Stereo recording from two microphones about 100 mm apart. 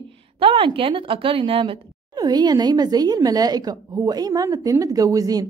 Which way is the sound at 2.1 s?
40° right (ahead or behind).